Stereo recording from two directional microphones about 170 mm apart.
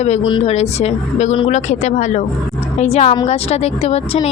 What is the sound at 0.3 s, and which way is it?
A woman's voice, 35° left (ahead or behind).